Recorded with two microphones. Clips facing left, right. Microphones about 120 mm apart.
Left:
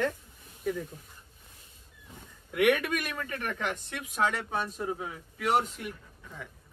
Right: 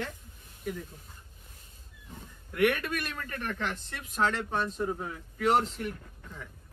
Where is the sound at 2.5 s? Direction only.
15° left (ahead or behind).